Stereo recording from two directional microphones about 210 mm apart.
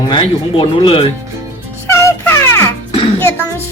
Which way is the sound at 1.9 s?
10° left (ahead or behind).